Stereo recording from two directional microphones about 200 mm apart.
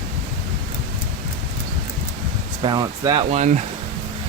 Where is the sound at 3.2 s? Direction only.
35° right (ahead or behind).